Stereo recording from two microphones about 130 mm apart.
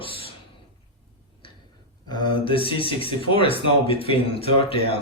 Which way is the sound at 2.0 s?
40° left (ahead or behind).